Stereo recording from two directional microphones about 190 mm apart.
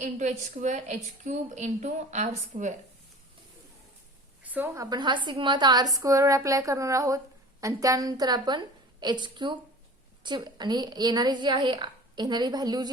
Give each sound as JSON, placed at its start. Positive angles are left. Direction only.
{"t": 0.0, "sound": "a woman's voice", "side_deg": -40}
{"t": 4.4, "sound": "a woman's voice", "side_deg": -10}